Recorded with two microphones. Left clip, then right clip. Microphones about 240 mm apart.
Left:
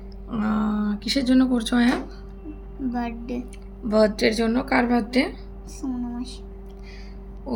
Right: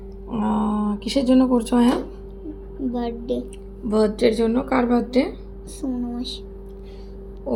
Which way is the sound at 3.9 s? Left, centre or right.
Centre.